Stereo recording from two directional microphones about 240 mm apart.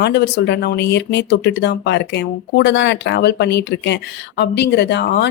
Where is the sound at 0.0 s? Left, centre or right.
Left.